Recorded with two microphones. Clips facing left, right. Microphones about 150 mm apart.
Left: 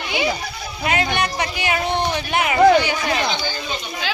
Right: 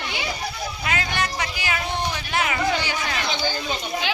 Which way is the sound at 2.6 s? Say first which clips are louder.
Left 15 dB; 60° left (ahead or behind).